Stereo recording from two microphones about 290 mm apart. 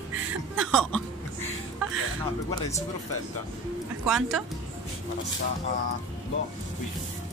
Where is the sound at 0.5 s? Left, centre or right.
Centre.